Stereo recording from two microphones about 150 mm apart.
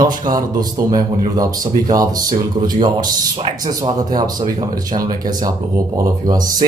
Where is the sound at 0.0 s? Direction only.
25° right (ahead or behind).